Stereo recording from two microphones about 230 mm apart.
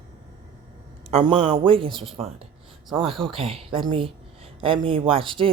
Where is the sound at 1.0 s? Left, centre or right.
Right.